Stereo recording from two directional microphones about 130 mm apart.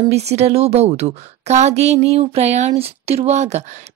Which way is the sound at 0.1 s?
55° right (ahead or behind).